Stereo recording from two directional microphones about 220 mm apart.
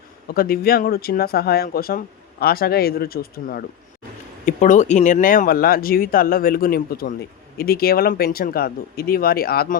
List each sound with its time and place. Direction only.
0.3 s speech: 45° left (ahead or behind)